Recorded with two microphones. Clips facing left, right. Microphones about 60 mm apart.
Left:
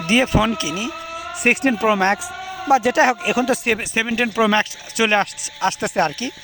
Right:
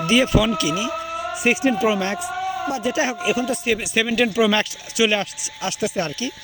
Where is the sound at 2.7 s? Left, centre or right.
Left.